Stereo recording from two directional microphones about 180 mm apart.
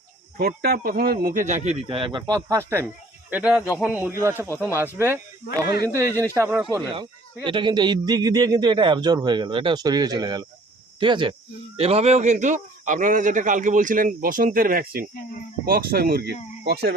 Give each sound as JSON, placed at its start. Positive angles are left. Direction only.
{"t": 0.3, "sound": "speech", "side_deg": -60}
{"t": 6.8, "sound": "a man's voice", "side_deg": -25}